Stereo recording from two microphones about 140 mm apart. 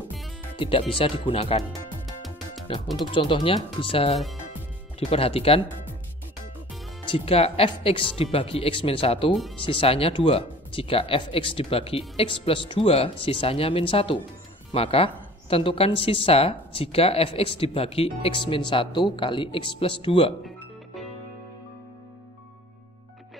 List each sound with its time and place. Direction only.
0.6 s a woman's voice: 40° left (ahead or behind)
1.6 s music: centre (ahead or behind)
3.1 s a woman's voice: 35° left (ahead or behind)
7.1 s a woman's voice: 45° left (ahead or behind)